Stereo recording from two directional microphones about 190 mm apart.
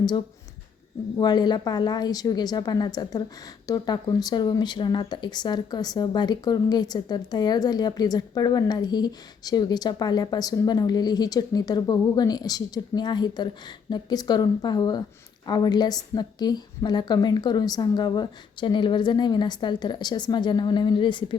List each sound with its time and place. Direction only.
1.2 s speech: 20° left (ahead or behind)